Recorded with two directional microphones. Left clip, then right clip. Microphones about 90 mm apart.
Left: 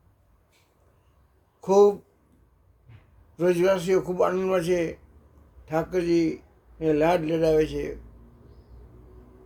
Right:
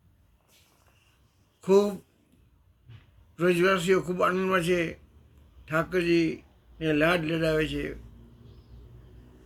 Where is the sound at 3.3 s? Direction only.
40° left (ahead or behind).